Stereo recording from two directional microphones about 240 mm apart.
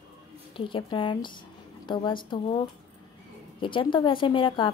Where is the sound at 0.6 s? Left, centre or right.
Left.